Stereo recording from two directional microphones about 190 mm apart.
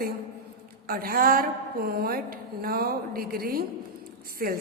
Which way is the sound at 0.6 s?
50° right (ahead or behind).